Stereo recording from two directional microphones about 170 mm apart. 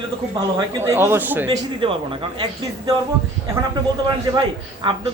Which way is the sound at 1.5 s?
30° right (ahead or behind).